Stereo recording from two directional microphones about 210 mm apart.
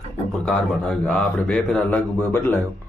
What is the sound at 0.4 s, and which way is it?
Speech, 5° left (ahead or behind).